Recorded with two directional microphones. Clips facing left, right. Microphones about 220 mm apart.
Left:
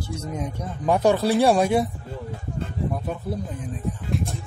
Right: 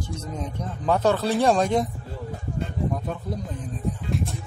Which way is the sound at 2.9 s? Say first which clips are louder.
Left 1 dB; 10° left (ahead or behind).